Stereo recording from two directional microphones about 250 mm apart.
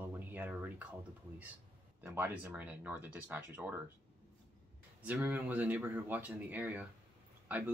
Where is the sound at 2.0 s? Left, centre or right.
Centre.